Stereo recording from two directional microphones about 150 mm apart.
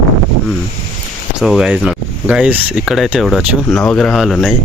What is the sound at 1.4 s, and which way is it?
Speech, 5° right (ahead or behind).